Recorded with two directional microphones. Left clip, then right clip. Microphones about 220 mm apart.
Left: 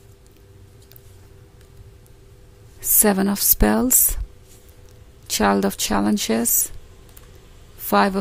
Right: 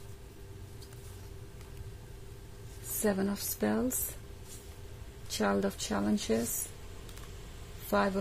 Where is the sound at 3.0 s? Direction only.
45° left (ahead or behind).